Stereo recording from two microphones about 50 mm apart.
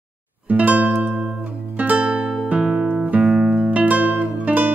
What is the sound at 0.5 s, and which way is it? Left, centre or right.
Music, right.